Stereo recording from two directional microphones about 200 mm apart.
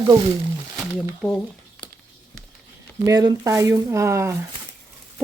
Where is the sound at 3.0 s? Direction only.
20° right (ahead or behind).